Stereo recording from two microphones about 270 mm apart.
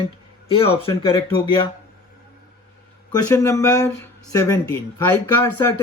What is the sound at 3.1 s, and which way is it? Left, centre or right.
Speech, centre.